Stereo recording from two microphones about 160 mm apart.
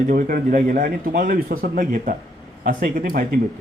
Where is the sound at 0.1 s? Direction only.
60° right (ahead or behind).